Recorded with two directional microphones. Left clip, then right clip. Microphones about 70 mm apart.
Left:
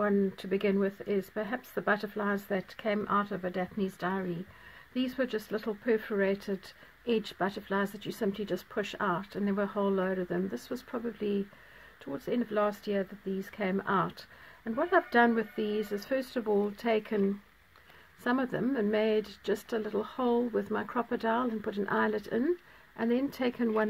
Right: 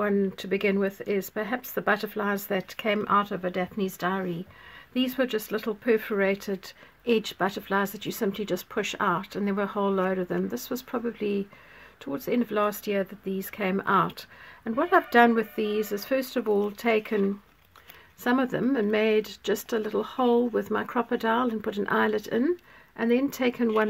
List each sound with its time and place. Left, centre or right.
0.4 s speech: centre
4.9 s speech: right
18.2 s speech: centre
22.9 s speech: centre